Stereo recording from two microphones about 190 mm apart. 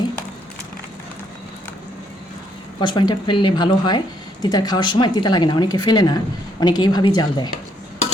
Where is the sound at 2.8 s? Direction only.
25° left (ahead or behind).